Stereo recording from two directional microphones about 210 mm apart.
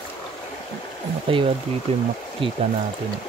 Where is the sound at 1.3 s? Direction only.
25° right (ahead or behind).